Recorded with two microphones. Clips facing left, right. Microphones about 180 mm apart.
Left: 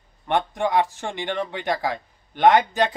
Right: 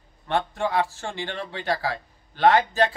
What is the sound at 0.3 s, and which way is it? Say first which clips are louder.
A man's voice: left 3 dB; 15° left (ahead or behind).